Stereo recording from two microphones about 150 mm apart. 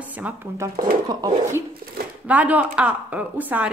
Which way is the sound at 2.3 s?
10° right (ahead or behind).